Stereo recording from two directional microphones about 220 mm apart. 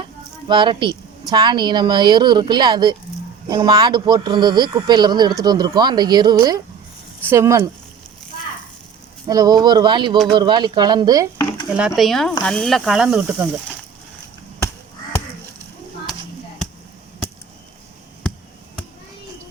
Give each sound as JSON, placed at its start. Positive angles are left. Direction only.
{"t": 0.0, "sound": "a sound", "side_deg": -20}
{"t": 1.3, "sound": "speech", "side_deg": -20}
{"t": 9.2, "sound": "speech", "side_deg": -15}
{"t": 11.7, "sound": "speech", "side_deg": -5}